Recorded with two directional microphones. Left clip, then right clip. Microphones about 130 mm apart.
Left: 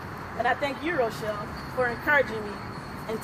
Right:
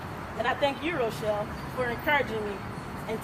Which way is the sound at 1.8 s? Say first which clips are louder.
Left 3 dB; 10° right (ahead or behind).